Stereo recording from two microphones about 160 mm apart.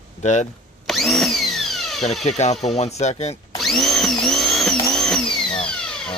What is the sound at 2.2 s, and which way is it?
Speech, 45° left (ahead or behind).